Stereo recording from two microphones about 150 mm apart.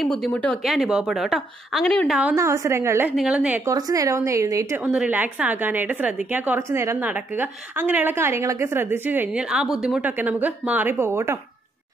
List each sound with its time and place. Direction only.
0.0 s a woman's voice: 5° left (ahead or behind)
2.3 s a woman's voice: 20° right (ahead or behind)
3.6 s a woman's voice: 25° right (ahead or behind)
4.8 s a woman's voice: 5° right (ahead or behind)